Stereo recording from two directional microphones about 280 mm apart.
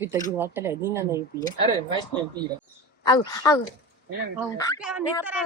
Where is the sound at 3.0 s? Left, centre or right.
Centre.